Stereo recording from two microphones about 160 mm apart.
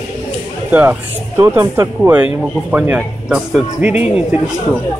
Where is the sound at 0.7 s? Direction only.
10° right (ahead or behind).